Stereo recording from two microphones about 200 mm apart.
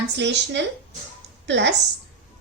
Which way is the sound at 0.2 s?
60° right (ahead or behind).